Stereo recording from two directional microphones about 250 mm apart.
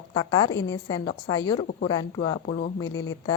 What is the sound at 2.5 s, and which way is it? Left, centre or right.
Speech, left.